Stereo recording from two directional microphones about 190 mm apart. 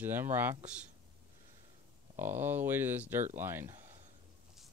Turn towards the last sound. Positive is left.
turn(degrees=-15)  # may be behind; listen again after turning